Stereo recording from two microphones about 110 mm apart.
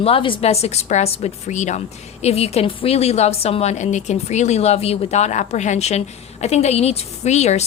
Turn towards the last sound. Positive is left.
turn(degrees=85)